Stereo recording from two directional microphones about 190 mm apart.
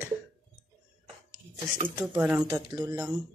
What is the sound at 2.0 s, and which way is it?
Speech, 5° right (ahead or behind).